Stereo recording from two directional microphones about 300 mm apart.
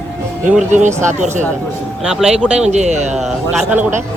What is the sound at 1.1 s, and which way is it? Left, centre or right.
Speech, right.